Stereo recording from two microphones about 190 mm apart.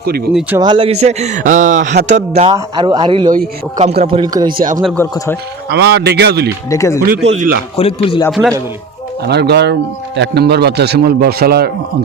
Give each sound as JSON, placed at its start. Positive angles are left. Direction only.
{"t": 0.0, "sound": "speech", "side_deg": -50}
{"t": 0.6, "sound": "a man's voice", "side_deg": -25}
{"t": 4.5, "sound": "speech", "side_deg": -45}
{"t": 4.8, "sound": "a man's voice", "side_deg": 0}
{"t": 5.1, "sound": "speech", "side_deg": 15}
{"t": 5.6, "sound": "a man's voice", "side_deg": -60}
{"t": 6.7, "sound": "speech", "side_deg": 15}
{"t": 7.3, "sound": "speech", "side_deg": -45}
{"t": 7.8, "sound": "speech", "side_deg": 30}
{"t": 8.3, "sound": "a man's voice", "side_deg": 0}
{"t": 9.2, "sound": "a man's voice", "side_deg": -60}